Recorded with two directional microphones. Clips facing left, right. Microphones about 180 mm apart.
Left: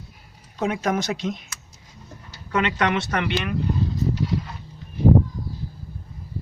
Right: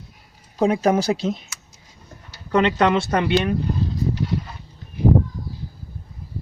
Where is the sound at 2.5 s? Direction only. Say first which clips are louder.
Right 5 dB; 30° right (ahead or behind).